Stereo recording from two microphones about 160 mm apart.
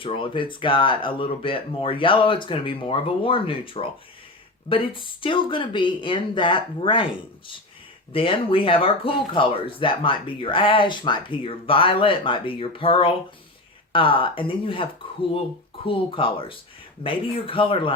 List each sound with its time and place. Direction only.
0.0 s speech: 35° left (ahead or behind)